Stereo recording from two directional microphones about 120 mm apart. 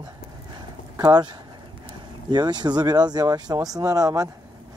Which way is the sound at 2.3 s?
35° right (ahead or behind).